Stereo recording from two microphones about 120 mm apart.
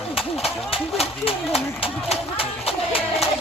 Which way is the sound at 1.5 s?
55° left (ahead or behind).